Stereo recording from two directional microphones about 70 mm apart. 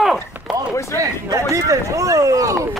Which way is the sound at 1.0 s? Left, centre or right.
Right.